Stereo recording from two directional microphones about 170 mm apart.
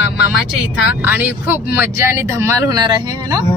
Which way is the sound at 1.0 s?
10° right (ahead or behind).